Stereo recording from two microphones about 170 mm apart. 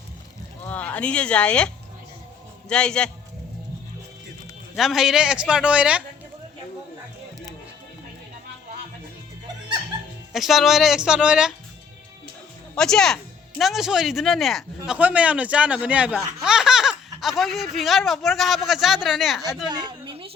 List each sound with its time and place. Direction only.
0.6 s speech: 10° left (ahead or behind)
4.7 s speech: centre (ahead or behind)
10.3 s speech: centre (ahead or behind)
12.7 s speech: 5° left (ahead or behind)
19.6 s a sound: 25° right (ahead or behind)